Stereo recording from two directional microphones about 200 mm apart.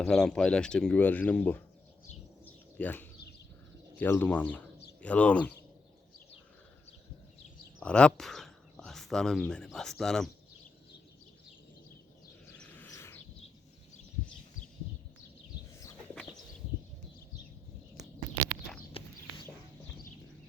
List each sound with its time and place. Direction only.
0.0 s speech: 5° left (ahead or behind)
2.4 s bird: 10° left (ahead or behind)
3.9 s speech: 10° left (ahead or behind)
7.8 s speech: 5° left (ahead or behind)
12.5 s bird: 10° left (ahead or behind)
19.0 s horse: 30° left (ahead or behind)